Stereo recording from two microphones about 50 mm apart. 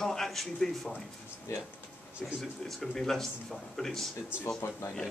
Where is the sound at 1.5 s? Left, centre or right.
Left.